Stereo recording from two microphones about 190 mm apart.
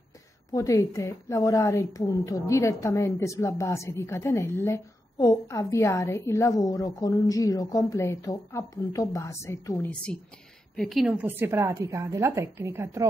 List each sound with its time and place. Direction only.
0.5 s a woman's voice: 20° left (ahead or behind)
10.8 s a woman's voice: centre (ahead or behind)